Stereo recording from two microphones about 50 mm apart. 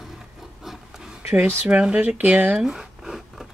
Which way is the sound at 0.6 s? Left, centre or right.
Centre.